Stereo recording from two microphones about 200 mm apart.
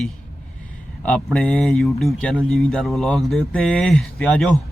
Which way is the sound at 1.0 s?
5° left (ahead or behind).